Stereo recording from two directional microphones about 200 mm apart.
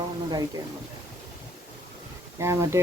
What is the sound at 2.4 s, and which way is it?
Speech, 15° right (ahead or behind).